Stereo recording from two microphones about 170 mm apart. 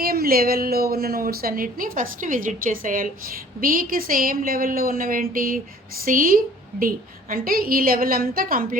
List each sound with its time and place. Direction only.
0.0 s speech: 60° right (ahead or behind)